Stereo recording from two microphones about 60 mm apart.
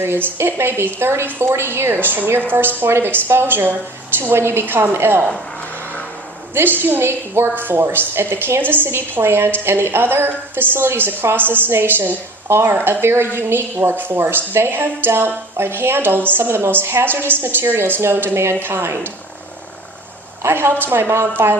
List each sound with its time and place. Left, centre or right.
0.0 s a woman's voice: right
6.5 s a woman's voice: right
20.4 s a woman's voice: right